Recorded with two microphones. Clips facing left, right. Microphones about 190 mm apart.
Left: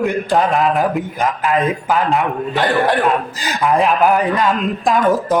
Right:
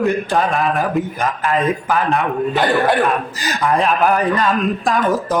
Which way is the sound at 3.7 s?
15° left (ahead or behind).